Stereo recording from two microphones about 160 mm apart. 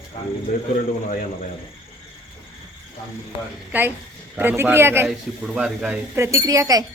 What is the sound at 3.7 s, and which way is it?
A woman's voice, 10° right (ahead or behind).